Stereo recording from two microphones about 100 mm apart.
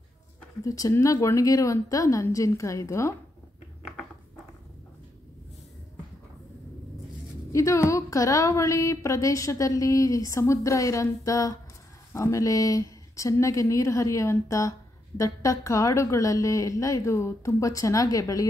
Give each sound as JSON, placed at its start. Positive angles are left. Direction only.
{"t": 0.7, "sound": "speech", "side_deg": 35}
{"t": 7.5, "sound": "speech", "side_deg": 30}